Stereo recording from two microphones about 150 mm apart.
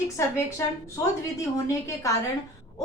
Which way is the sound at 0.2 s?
20° left (ahead or behind).